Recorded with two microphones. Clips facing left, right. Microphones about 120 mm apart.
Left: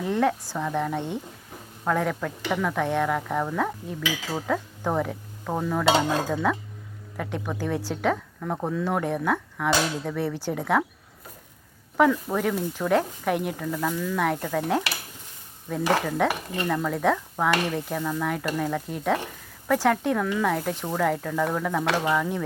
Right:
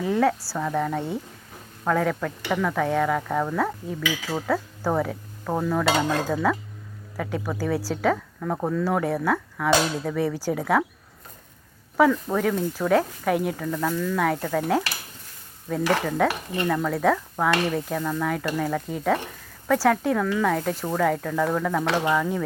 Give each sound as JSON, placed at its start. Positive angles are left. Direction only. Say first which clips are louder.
{"t": 0.0, "sound": "speech", "louder": "right 2 dB", "side_deg": 0}
{"t": 5.8, "sound": "stir", "louder": "left 1 dB", "side_deg": 15}
{"t": 6.3, "sound": "speech", "louder": "right 2 dB", "side_deg": 0}
{"t": 9.1, "sound": "speech", "louder": "right 1 dB", "side_deg": 10}
{"t": 10.0, "sound": "speech", "louder": "right 3 dB", "side_deg": -10}
{"t": 12.1, "sound": "speech", "louder": "right 2 dB", "side_deg": 5}
{"t": 15.7, "sound": "stir", "louder": "right 1 dB", "side_deg": 10}
{"t": 16.6, "sound": "speech", "louder": "right 2 dB", "side_deg": 5}